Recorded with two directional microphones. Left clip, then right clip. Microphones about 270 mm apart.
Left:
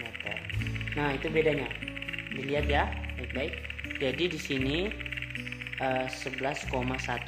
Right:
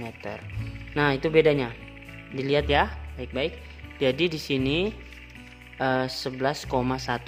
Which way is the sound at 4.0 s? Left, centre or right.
Right.